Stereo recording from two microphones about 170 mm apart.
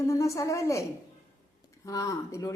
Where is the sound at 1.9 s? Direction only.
20° left (ahead or behind).